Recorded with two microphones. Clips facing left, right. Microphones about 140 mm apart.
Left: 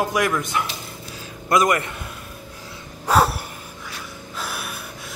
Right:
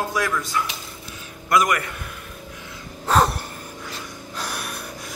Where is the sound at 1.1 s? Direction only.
25° left (ahead or behind).